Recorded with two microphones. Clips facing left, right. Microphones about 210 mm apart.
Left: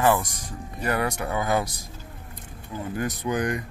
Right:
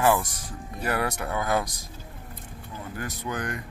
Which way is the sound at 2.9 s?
20° left (ahead or behind).